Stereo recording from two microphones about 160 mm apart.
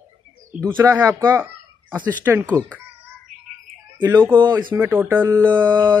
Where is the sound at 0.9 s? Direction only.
20° right (ahead or behind).